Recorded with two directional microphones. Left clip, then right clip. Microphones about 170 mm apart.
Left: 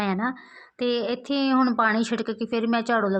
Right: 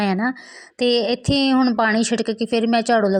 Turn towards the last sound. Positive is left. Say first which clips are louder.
# right 6 dB
turn(degrees=-40)  # may be behind; listen again after turning